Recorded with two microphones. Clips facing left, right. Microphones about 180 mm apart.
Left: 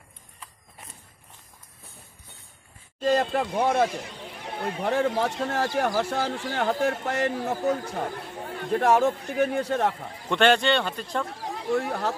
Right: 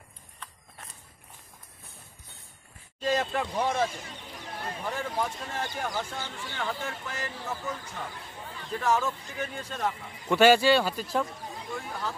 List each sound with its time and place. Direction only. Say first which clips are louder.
3.0 s speech: left 5 dB; 45° left (ahead or behind); by 6.4 s 80° left
6.8 s speech: left 11 dB; 65° left (ahead or behind)
10.3 s a man's voice: right 1 dB; 5° right (ahead or behind)
11.2 s speech: left 9 dB; 80° left